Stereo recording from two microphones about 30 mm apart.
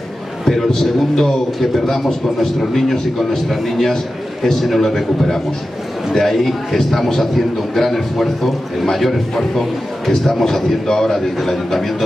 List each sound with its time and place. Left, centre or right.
0.5 s a man's voice: centre
11.3 s a man's voice: centre